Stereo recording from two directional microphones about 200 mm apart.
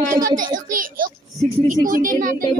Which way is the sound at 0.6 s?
45° right (ahead or behind).